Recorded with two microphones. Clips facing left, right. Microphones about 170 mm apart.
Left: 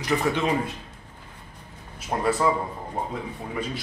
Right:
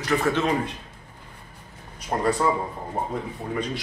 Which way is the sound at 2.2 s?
5° left (ahead or behind).